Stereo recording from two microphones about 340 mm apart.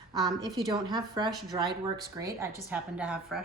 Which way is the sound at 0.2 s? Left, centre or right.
Centre.